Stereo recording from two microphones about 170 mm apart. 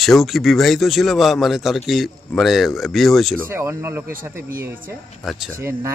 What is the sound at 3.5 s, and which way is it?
Speech, 15° right (ahead or behind).